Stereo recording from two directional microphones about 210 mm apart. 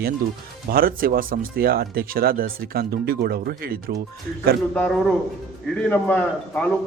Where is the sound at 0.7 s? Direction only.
45° right (ahead or behind).